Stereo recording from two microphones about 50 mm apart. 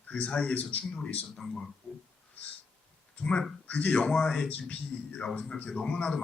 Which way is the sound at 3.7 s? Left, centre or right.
Left.